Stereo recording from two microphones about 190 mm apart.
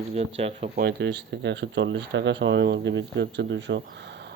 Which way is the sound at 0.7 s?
60° right (ahead or behind).